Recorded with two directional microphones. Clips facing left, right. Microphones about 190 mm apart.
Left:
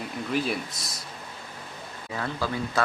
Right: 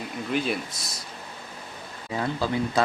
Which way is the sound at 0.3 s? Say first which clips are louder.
Right 1 dB; centre (ahead or behind).